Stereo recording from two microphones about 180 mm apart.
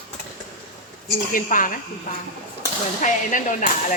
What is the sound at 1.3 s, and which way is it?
Speech, 50° left (ahead or behind).